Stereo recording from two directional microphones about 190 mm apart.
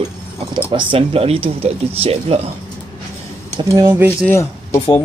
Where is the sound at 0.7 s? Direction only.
25° right (ahead or behind).